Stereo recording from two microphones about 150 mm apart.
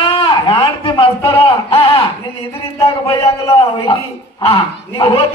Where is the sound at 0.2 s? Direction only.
30° left (ahead or behind).